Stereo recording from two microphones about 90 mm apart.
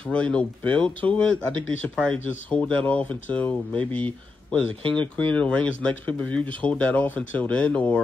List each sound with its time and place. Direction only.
0.0 s speech: 15° left (ahead or behind)